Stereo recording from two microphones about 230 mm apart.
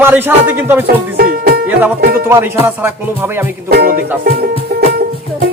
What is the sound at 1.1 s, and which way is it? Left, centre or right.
Music, right.